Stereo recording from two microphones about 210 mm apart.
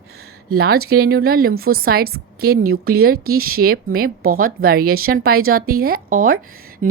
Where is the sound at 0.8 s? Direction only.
90° right.